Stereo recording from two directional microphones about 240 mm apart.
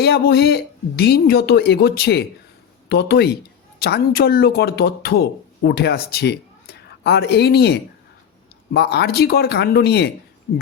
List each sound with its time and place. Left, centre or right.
0.0 s speech: left